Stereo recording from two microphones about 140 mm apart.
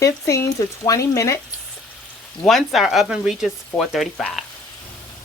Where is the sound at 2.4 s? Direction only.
Centre (ahead or behind).